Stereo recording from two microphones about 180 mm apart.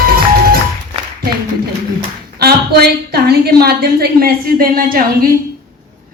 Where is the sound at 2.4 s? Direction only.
60° right (ahead or behind).